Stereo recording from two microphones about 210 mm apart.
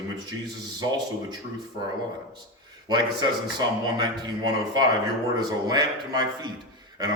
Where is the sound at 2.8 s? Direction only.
20° right (ahead or behind).